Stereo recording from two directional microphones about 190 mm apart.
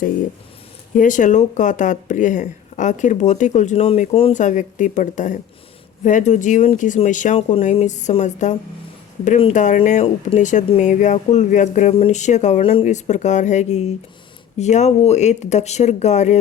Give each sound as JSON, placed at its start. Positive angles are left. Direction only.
{"t": 0.9, "sound": "speech", "side_deg": 40}